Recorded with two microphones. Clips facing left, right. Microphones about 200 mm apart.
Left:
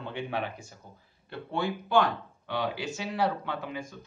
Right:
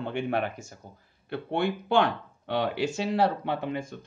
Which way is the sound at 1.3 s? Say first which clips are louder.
Right 4 dB; 65° right (ahead or behind).